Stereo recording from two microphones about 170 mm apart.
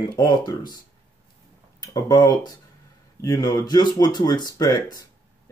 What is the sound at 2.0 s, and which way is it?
Speech, 20° left (ahead or behind).